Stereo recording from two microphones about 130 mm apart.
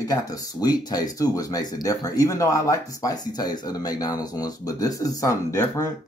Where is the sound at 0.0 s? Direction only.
25° left (ahead or behind).